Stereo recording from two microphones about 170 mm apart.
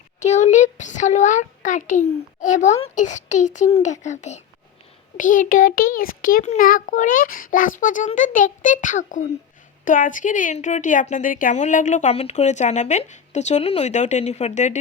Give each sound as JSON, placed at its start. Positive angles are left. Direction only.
{"t": 0.2, "sound": "a woman's voice", "side_deg": 40}